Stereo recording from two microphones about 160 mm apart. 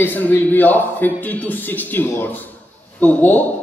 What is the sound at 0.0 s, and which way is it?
A man's voice, 10° left (ahead or behind).